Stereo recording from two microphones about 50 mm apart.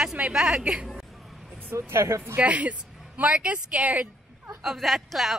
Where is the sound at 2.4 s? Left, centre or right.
Right.